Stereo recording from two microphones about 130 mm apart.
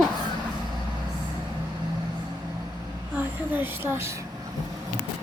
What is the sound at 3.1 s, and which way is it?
Speech, 15° right (ahead or behind).